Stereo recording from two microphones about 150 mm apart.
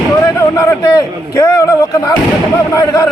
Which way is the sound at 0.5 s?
20° left (ahead or behind).